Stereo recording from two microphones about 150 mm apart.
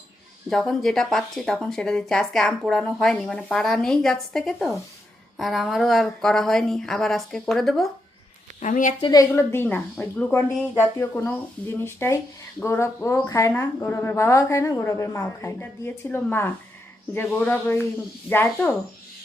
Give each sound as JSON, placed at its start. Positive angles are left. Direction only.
{"t": 0.5, "sound": "speech", "side_deg": 0}
{"t": 8.6, "sound": "speech", "side_deg": 55}
{"t": 9.0, "sound": "a woman's voice", "side_deg": 30}
{"t": 9.3, "sound": "speech", "side_deg": 15}